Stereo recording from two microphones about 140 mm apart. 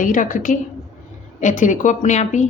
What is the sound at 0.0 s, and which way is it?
A woman's voice, 70° left (ahead or behind).